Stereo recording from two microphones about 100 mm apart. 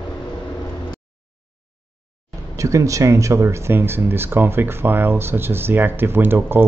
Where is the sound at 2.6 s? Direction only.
30° right (ahead or behind).